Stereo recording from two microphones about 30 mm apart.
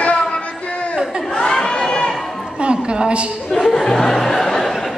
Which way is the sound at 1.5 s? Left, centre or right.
Left.